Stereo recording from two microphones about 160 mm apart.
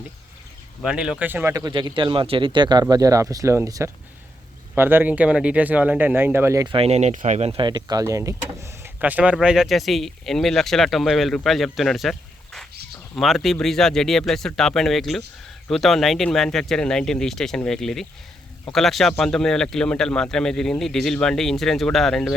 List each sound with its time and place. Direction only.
0.8 s speech: 5° right (ahead or behind); by 6.7 s 20° right (ahead or behind)
6.7 s speech: 40° right (ahead or behind); by 12.1 s centre (ahead or behind)
13.1 s speech: centre (ahead or behind)